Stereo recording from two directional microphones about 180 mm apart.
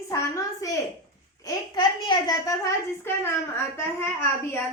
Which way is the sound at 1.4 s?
20° left (ahead or behind).